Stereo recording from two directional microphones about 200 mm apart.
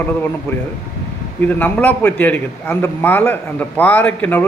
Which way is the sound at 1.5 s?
10° left (ahead or behind).